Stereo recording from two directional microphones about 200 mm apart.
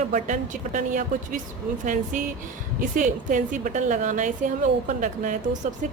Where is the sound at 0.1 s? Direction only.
40° right (ahead or behind).